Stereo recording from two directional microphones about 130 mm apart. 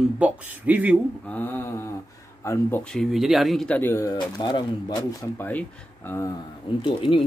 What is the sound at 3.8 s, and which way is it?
Speech, 15° left (ahead or behind).